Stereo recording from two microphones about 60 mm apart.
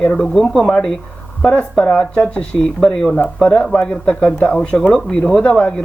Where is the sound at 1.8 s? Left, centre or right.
Centre.